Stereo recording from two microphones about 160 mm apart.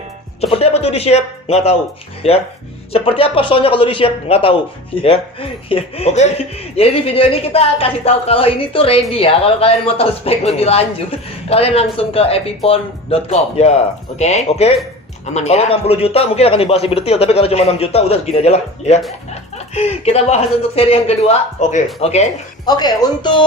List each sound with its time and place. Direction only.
0.4 s speech: 40° left (ahead or behind)
22.6 s speech: 25° left (ahead or behind)